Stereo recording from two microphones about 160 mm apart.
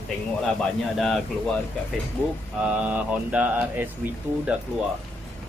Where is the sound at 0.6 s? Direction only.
Centre (ahead or behind).